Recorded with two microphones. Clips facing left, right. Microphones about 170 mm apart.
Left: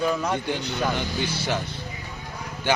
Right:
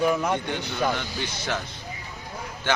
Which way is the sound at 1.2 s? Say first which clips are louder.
Left 3 dB; 30° left (ahead or behind).